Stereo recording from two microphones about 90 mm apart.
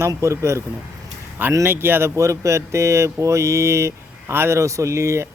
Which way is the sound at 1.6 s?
25° right (ahead or behind).